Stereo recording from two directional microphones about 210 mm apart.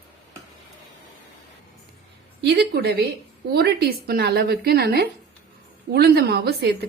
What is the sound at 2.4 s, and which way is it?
Speech, 55° right (ahead or behind).